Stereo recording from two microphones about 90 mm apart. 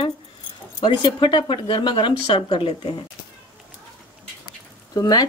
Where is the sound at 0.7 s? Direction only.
60° left (ahead or behind).